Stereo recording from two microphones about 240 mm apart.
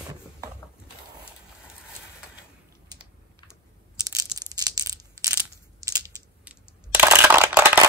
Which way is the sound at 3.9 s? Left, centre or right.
Centre.